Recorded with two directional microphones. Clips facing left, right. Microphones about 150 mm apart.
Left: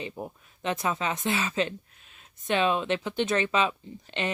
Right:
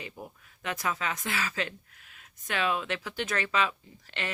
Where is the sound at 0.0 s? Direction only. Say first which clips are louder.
Left 6 dB; 25° left (ahead or behind).